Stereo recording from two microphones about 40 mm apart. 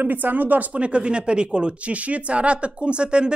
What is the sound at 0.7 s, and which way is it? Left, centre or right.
Speech, right.